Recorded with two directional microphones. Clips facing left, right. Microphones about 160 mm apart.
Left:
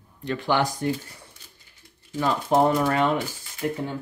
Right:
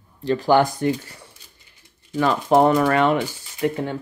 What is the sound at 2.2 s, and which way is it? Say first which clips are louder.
Speech: right 4 dB; 85° right.